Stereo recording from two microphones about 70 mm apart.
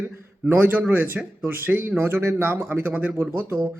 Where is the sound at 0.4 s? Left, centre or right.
Right.